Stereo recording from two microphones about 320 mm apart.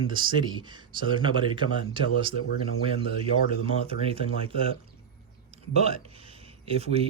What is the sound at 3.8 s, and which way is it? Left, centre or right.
Speech, centre.